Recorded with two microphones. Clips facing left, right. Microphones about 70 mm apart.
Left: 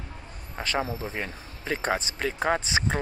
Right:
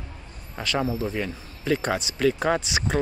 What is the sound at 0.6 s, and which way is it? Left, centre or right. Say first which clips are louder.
Speech: right 3 dB; left.